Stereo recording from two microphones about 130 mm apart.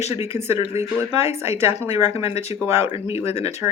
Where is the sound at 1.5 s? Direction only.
20° right (ahead or behind).